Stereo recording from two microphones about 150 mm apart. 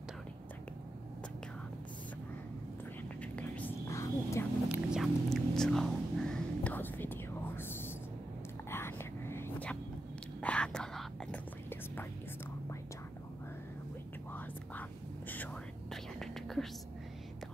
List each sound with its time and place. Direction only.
3.2 s whispering: 10° left (ahead or behind)
4.6 s whispering: 5° right (ahead or behind)
14.3 s whispering: 10° left (ahead or behind)